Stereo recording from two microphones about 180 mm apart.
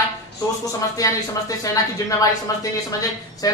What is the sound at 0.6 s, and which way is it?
Speech, 20° left (ahead or behind).